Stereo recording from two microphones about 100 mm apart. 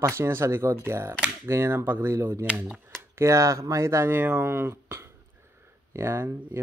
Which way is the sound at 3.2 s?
30° right (ahead or behind).